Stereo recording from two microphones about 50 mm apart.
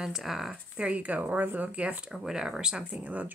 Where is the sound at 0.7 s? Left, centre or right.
Right.